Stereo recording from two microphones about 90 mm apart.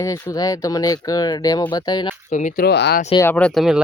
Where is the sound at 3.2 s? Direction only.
15° left (ahead or behind).